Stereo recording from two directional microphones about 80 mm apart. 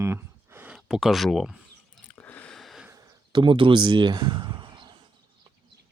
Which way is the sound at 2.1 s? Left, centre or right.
Centre.